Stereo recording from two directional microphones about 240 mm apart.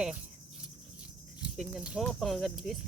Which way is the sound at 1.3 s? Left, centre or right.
Centre.